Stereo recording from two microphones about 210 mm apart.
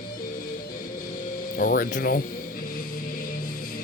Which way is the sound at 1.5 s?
40° left (ahead or behind).